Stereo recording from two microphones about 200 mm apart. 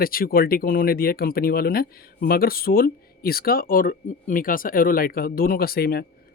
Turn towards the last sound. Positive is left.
turn(degrees=50)  # may be behind; listen again after turning